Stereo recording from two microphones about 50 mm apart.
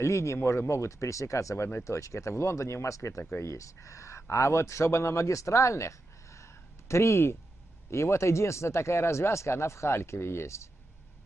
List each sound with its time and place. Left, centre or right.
0.0 s speech: left
7.9 s speech: left